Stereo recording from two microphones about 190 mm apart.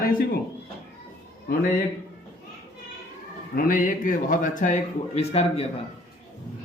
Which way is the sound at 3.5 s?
45° left (ahead or behind).